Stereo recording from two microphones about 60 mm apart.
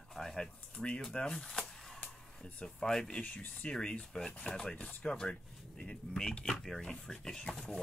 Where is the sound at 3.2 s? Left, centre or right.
Left.